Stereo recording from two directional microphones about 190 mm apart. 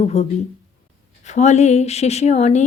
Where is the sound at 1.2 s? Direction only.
35° left (ahead or behind).